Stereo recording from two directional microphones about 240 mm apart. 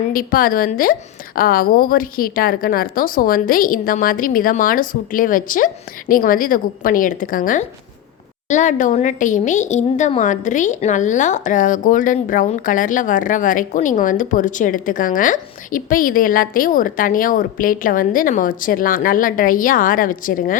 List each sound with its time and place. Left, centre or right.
0.1 s a woman's voice: left